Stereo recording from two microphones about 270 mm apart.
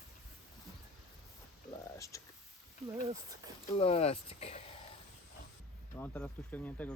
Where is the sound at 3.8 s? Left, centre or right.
Left.